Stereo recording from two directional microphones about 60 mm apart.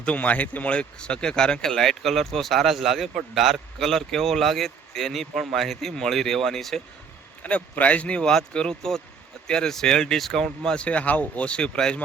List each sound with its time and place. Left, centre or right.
0.0 s speech: left; by 6.8 s centre
7.4 s speech: left